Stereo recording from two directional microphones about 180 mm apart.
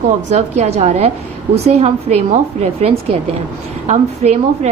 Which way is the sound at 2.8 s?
35° right (ahead or behind).